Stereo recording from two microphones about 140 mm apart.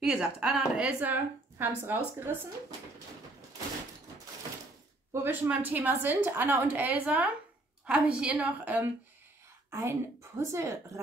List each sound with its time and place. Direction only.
0.0 s a woman's voice: 5° right (ahead or behind)
5.1 s a woman's voice: 15° right (ahead or behind)
9.7 s a woman's voice: 20° right (ahead or behind)